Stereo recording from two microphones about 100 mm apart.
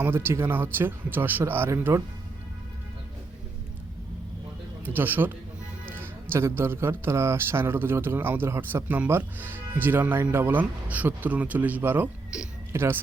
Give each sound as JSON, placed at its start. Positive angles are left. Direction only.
{"t": 0.0, "sound": "a man's voice", "side_deg": -25}
{"t": 4.9, "sound": "a man's voice", "side_deg": -20}
{"t": 5.8, "sound": "music", "side_deg": -20}
{"t": 6.6, "sound": "a man's voice", "side_deg": -25}